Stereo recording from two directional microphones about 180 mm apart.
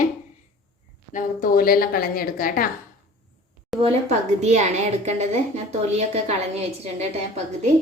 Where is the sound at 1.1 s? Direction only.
50° left (ahead or behind).